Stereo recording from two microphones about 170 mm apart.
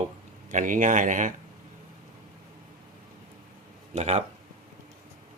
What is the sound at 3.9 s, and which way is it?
Speech, 40° right (ahead or behind).